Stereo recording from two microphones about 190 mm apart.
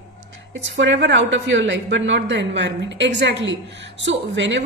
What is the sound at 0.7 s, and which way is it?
A woman's voice, 65° right (ahead or behind).